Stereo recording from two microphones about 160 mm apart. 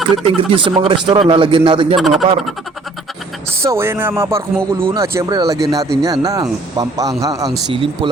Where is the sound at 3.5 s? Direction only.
15° right (ahead or behind).